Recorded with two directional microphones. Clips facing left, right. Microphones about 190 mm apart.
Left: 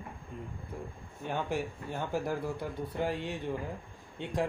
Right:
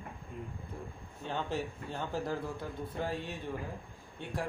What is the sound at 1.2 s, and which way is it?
A man's voice, 15° left (ahead or behind).